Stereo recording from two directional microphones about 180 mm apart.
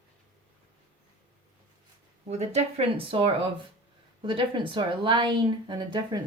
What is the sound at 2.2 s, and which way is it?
Speech, 40° right (ahead or behind).